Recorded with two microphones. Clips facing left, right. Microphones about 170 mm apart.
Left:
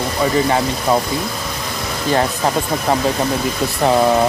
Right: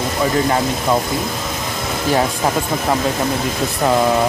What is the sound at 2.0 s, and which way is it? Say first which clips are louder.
Speech: even; 5° right (ahead or behind).